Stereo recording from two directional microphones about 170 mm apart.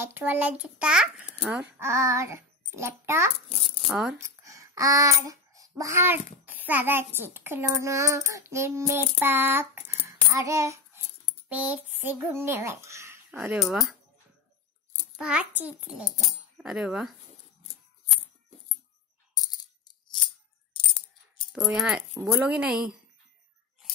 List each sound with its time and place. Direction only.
0.0 s a child's voice: 10° right (ahead or behind)
3.4 s speech: 35° left (ahead or behind)
3.9 s a child's voice: 5° right (ahead or behind)
4.2 s babbling: 20° right (ahead or behind)
6.4 s a child's voice: 10° right (ahead or behind)
10.0 s a sound: 15° right (ahead or behind)
12.0 s speech: 10° right (ahead or behind)
15.1 s a child's voice: 5° right (ahead or behind)
21.5 s a child's voice: 5° right (ahead or behind)
22.1 s a child's voice: 15° right (ahead or behind)